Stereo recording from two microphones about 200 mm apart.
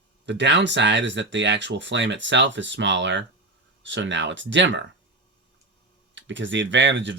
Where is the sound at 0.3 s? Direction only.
60° right (ahead or behind).